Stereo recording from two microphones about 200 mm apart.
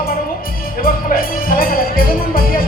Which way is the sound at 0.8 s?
45° left (ahead or behind).